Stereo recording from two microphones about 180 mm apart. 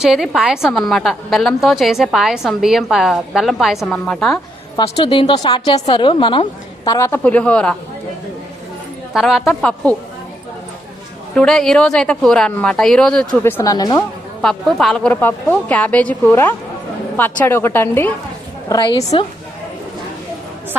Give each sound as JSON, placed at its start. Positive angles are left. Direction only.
{"t": 0.0, "sound": "a woman's voice", "side_deg": 0}
{"t": 4.8, "sound": "a woman's voice", "side_deg": 25}
{"t": 9.1, "sound": "a woman's voice", "side_deg": 0}
{"t": 11.3, "sound": "a woman's voice", "side_deg": 5}
{"t": 14.4, "sound": "a woman's voice", "side_deg": 0}
{"t": 18.7, "sound": "a woman's voice", "side_deg": 25}